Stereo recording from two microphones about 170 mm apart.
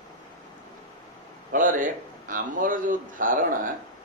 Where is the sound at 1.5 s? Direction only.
50° right (ahead or behind).